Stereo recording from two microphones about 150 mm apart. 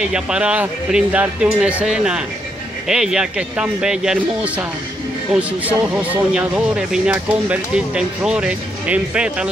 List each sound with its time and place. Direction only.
0.0 s speech: 5° right (ahead or behind)